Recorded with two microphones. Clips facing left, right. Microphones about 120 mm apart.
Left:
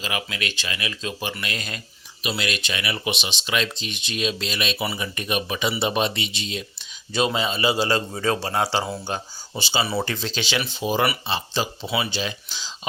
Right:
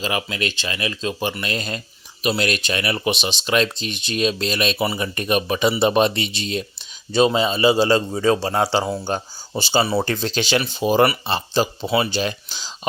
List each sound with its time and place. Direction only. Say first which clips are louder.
0.0 s speech: right 5 dB; 30° right (ahead or behind)
2.2 s speech: right 6 dB; 45° right (ahead or behind)
7.1 s a man's voice: right 6 dB; 30° right (ahead or behind)
9.0 s speech: right 5 dB; 40° right (ahead or behind)
9.8 s a man's voice: right 4 dB; 30° right (ahead or behind)
10.1 s speech: right 6 dB; 45° right (ahead or behind)